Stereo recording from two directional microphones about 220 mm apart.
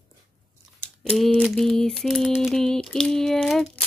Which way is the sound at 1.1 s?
Centre (ahead or behind).